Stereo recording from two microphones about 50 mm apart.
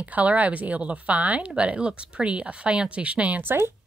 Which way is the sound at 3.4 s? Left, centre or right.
Right.